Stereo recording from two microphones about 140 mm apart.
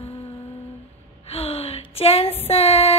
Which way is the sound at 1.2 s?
45° left (ahead or behind).